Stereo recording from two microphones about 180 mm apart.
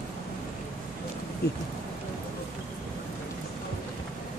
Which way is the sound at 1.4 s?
60° left (ahead or behind).